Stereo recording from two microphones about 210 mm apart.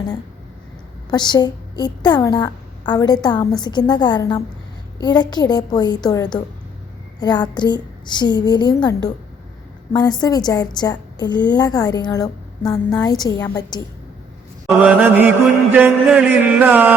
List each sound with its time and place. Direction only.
1.1 s a woman's voice: 20° left (ahead or behind)
14.7 s mantra: 5° right (ahead or behind)
15.7 s chant: 5° right (ahead or behind)